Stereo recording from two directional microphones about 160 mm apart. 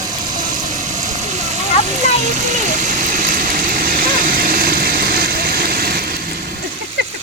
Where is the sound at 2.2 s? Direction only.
50° right (ahead or behind); by 6.1 s 75° right (ahead or behind).